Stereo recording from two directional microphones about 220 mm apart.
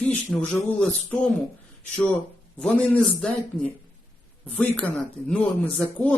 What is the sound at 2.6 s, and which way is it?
Speech, 5° left (ahead or behind).